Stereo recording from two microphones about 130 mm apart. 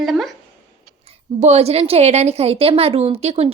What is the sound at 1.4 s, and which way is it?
A woman's voice, 55° right (ahead or behind).